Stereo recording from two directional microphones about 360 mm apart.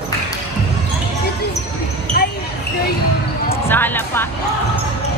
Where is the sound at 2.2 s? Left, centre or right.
Left.